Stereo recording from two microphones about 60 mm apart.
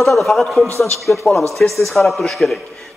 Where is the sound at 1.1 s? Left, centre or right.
Left.